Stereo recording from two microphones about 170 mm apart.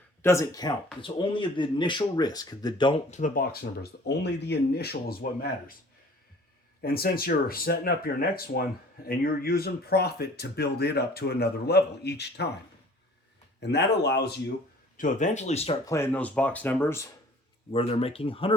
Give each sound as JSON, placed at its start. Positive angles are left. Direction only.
{"t": 0.2, "sound": "speech", "side_deg": 15}
{"t": 3.1, "sound": "speech", "side_deg": 50}
{"t": 4.0, "sound": "speech", "side_deg": 80}
{"t": 6.8, "sound": "speech", "side_deg": 65}
{"t": 13.6, "sound": "speech", "side_deg": 85}
{"t": 14.9, "sound": "speech", "side_deg": 50}
{"t": 15.9, "sound": "speech", "side_deg": 10}
{"t": 17.7, "sound": "speech", "side_deg": 35}